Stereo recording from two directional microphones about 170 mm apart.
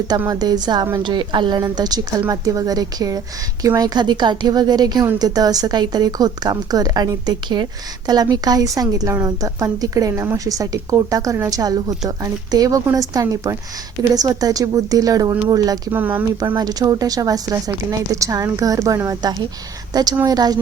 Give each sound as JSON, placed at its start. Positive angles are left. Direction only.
{"t": 0.3, "sound": "a woman's voice", "side_deg": -25}
{"t": 16.0, "sound": "speech", "side_deg": -10}
{"t": 16.4, "sound": "a woman's voice", "side_deg": -25}